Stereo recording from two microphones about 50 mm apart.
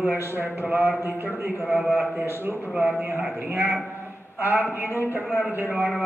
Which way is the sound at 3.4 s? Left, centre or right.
Right.